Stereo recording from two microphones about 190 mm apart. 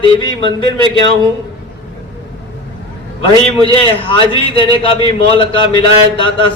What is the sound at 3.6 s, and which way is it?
A man's voice, 30° left (ahead or behind).